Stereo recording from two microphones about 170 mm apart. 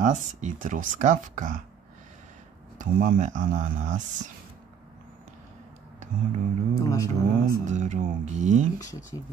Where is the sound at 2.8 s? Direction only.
50° right (ahead or behind).